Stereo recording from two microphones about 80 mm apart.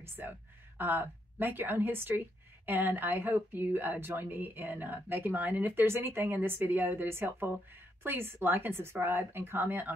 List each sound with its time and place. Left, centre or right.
0.0 s speech: right